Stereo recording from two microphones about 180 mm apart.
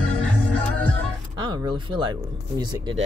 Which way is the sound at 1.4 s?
25° right (ahead or behind).